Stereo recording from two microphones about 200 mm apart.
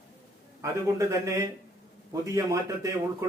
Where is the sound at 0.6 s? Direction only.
15° right (ahead or behind).